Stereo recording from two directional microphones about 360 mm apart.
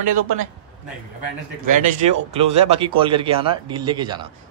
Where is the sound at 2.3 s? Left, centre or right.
Centre.